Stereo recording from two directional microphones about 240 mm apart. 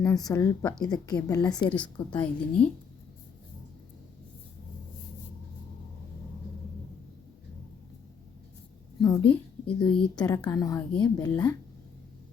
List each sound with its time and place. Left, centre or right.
0.0 s a woman's voice: centre
1.7 s a woman's voice: centre
9.0 s a woman's voice: centre